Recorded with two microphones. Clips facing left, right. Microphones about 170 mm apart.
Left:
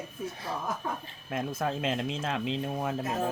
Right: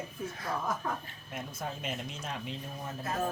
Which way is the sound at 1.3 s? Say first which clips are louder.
Left 8 dB; 90° left.